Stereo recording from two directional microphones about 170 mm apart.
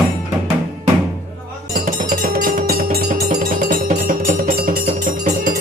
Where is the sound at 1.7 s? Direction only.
55° right (ahead or behind).